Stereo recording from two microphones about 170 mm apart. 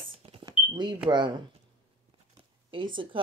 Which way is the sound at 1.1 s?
25° right (ahead or behind).